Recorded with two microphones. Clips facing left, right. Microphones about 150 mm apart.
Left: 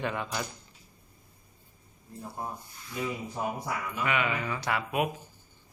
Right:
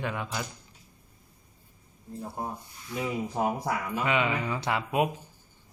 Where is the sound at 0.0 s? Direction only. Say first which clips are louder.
Left 1 dB; 5° right (ahead or behind).